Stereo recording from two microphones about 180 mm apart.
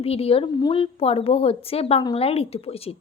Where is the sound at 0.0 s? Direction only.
35° left (ahead or behind).